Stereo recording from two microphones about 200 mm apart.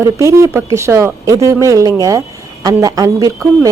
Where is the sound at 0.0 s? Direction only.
15° right (ahead or behind).